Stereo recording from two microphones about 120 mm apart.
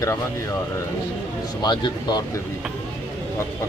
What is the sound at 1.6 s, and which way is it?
Speech, 35° left (ahead or behind).